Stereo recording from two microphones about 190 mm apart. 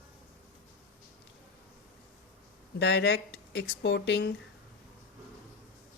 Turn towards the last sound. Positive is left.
turn(degrees=60)  # may be behind; listen again after turning